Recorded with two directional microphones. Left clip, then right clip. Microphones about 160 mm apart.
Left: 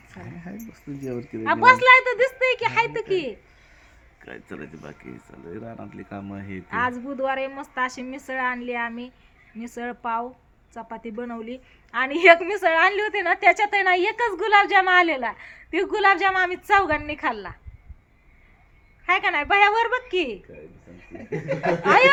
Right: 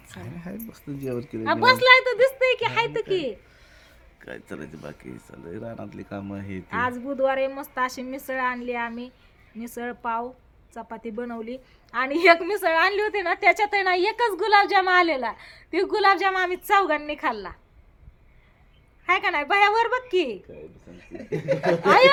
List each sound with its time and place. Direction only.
0.4 s speech: 15° right (ahead or behind)
1.5 s a woman's voice: 10° left (ahead or behind)
4.3 s speech: 25° right (ahead or behind)
6.7 s a woman's voice: 10° left (ahead or behind)
19.0 s a woman's voice: 10° left (ahead or behind)
21.4 s speech: 20° right (ahead or behind)
21.8 s a woman's voice: 5° left (ahead or behind)